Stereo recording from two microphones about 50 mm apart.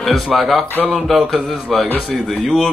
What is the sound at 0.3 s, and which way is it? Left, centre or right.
Speech, centre.